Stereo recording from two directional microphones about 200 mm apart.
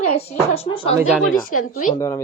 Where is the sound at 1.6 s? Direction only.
40° left (ahead or behind).